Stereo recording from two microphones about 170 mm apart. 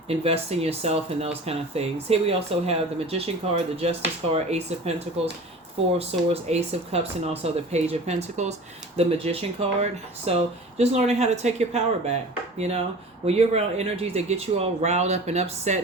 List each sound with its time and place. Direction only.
0.1 s speech: 35° right (ahead or behind)